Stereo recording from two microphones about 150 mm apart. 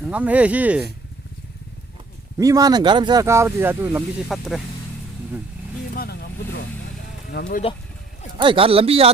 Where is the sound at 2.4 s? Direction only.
25° right (ahead or behind).